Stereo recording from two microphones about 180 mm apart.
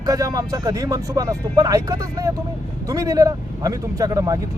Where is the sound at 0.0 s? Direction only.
20° right (ahead or behind).